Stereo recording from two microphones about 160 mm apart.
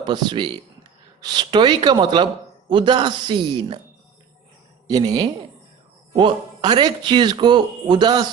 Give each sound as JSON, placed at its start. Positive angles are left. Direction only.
{"t": 0.0, "sound": "speech", "side_deg": -30}
{"t": 4.9, "sound": "speech", "side_deg": -25}